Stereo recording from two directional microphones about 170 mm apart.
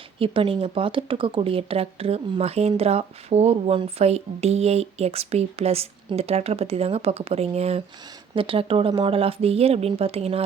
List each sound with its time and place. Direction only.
0.2 s speech: 30° right (ahead or behind)